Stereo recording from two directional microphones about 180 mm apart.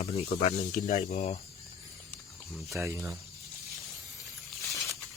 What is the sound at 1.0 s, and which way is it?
Speech, 35° left (ahead or behind).